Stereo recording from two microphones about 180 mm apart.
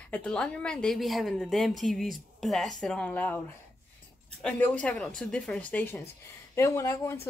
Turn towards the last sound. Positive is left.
turn(degrees=15)  # may be behind; listen again after turning